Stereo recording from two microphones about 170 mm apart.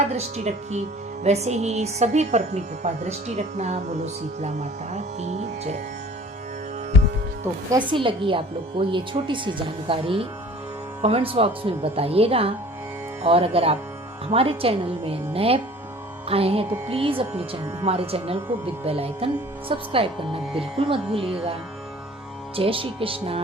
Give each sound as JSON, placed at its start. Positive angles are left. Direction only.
{"t": 0.2, "sound": "speech", "side_deg": -40}
{"t": 7.7, "sound": "a woman's voice", "side_deg": -30}
{"t": 22.5, "sound": "speech", "side_deg": -30}